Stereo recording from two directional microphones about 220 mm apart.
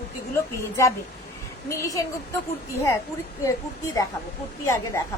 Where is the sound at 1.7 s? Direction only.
15° left (ahead or behind).